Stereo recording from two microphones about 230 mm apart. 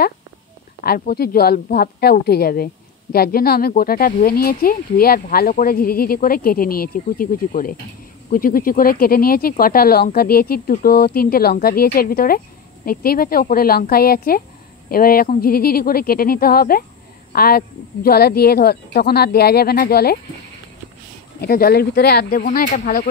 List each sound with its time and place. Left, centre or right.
0.8 s a woman's voice: left
21.4 s speech: left